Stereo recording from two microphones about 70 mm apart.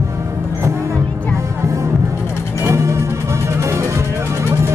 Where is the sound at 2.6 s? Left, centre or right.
Right.